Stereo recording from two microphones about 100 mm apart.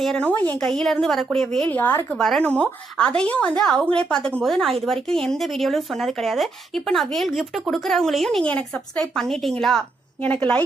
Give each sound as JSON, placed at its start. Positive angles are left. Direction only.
{"t": 0.2, "sound": "a woman's voice", "side_deg": 15}
{"t": 1.7, "sound": "speech", "side_deg": 20}
{"t": 2.1, "sound": "a woman's voice", "side_deg": 5}